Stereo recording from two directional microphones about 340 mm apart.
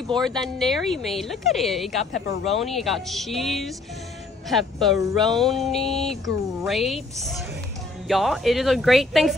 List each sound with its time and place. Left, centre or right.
0.2 s a woman's voice: centre